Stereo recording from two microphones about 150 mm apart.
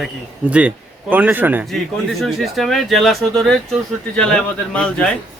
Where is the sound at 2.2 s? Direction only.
Centre (ahead or behind).